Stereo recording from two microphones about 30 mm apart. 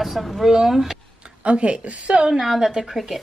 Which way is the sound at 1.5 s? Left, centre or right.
Right.